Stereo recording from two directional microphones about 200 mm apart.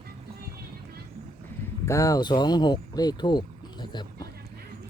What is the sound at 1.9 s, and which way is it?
Speech, 15° left (ahead or behind).